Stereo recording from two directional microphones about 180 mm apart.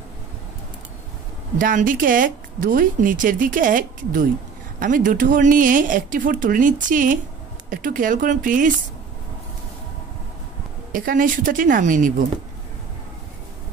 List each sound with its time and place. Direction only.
1.6 s speech: 50° right (ahead or behind)
10.9 s speech: 50° right (ahead or behind)